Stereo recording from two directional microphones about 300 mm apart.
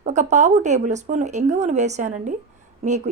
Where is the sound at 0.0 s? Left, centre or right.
Right.